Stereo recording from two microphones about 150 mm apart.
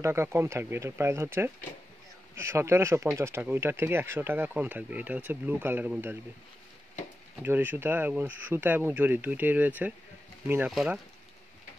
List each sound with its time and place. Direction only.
0.0 s speech: 15° right (ahead or behind)
7.4 s speech: 15° right (ahead or behind)